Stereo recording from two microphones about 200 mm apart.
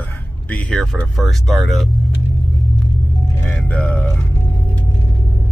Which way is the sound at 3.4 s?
5° left (ahead or behind).